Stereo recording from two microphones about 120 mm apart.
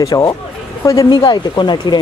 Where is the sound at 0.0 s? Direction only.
30° left (ahead or behind).